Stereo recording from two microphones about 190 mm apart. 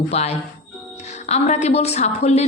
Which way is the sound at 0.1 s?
35° left (ahead or behind).